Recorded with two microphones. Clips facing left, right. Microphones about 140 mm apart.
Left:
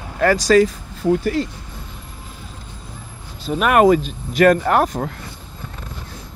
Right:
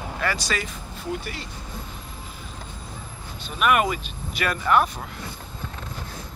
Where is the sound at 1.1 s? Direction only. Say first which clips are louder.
Left 13 dB; 90° left.